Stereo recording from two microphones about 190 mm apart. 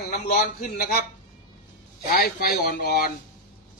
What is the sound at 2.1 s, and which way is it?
A man's voice, 50° left (ahead or behind).